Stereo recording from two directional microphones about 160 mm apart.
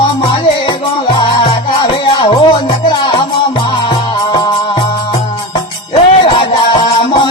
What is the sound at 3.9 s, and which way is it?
Music, 25° left (ahead or behind).